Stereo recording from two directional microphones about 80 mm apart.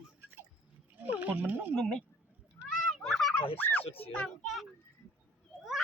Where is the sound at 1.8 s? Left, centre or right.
Centre.